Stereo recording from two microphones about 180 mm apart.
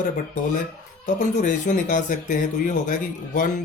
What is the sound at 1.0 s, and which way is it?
Speech, 45° left (ahead or behind).